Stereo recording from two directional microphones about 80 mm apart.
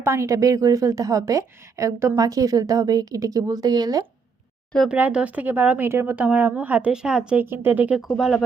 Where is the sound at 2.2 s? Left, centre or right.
Right.